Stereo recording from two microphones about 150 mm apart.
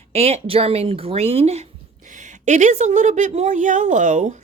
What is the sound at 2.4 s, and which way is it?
A woman's voice, 55° right (ahead or behind).